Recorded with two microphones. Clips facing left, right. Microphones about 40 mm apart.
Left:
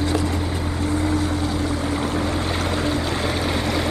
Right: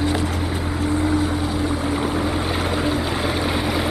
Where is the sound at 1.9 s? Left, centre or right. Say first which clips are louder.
Right 1 dB; centre.